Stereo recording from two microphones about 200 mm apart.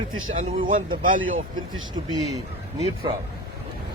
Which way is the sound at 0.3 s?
45° right (ahead or behind).